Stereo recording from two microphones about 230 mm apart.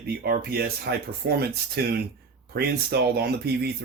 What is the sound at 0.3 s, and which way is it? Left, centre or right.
Speech, right.